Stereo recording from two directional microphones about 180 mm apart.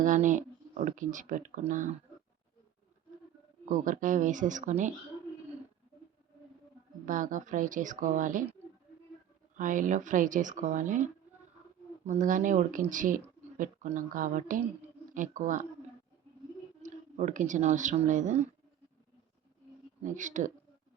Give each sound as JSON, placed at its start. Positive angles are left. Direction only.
{"t": 0.0, "sound": "speech", "side_deg": -45}
{"t": 3.7, "sound": "speech", "side_deg": -45}
{"t": 7.0, "sound": "speech", "side_deg": -45}
{"t": 9.6, "sound": "speech", "side_deg": -45}
{"t": 16.8, "sound": "speech", "side_deg": -45}
{"t": 20.1, "sound": "speech", "side_deg": -45}